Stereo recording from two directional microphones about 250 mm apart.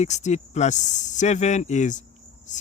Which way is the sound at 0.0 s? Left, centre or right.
Left.